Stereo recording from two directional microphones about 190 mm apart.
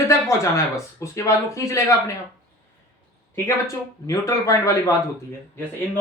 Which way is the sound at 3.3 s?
15° left (ahead or behind).